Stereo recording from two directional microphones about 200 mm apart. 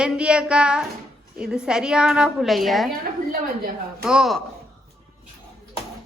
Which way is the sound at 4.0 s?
Centre (ahead or behind).